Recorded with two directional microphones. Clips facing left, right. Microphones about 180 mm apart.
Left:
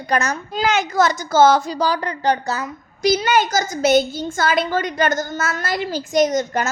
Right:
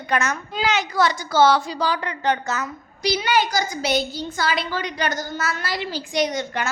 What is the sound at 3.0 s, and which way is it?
A woman's voice, 45° left (ahead or behind).